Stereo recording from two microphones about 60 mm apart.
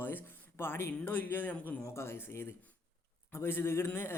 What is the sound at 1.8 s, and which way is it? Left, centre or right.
A man's voice, left.